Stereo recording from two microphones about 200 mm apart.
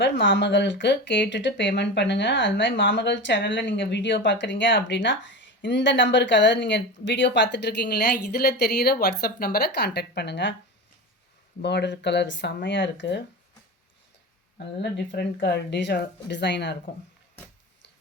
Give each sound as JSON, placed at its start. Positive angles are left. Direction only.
{"t": 0.0, "sound": "speech", "side_deg": 65}
{"t": 11.6, "sound": "speech", "side_deg": 60}
{"t": 14.8, "sound": "speech", "side_deg": 55}